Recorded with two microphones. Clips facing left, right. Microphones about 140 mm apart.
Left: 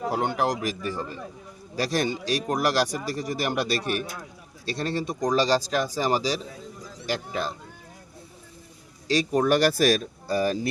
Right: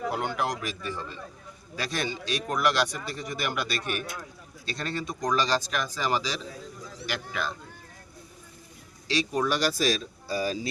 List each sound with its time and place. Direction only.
0.0 s a sound: 35° left (ahead or behind)
0.3 s speech: 40° left (ahead or behind)
9.0 s speech: 45° left (ahead or behind)